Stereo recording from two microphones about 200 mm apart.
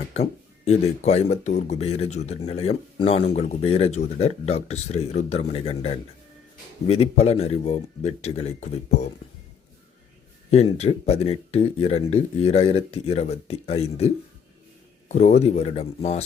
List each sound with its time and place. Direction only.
0.1 s speech: 35° left (ahead or behind)
10.5 s speech: 30° left (ahead or behind)
15.1 s speech: 35° left (ahead or behind)